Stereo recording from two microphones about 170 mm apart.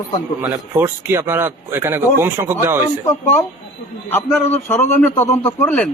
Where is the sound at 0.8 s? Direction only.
15° right (ahead or behind).